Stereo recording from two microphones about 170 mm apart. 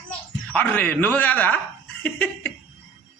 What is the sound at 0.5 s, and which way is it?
Speech, 10° left (ahead or behind).